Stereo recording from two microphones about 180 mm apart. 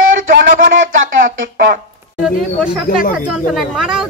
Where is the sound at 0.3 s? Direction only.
50° right (ahead or behind).